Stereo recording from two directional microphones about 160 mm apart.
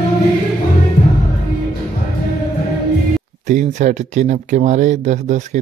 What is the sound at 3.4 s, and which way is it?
Speech, 50° right (ahead or behind).